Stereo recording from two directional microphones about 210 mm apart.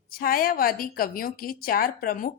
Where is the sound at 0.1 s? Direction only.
45° left (ahead or behind).